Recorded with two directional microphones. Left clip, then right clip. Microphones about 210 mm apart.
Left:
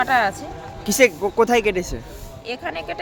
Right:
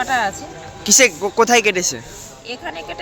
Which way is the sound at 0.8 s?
Centre (ahead or behind).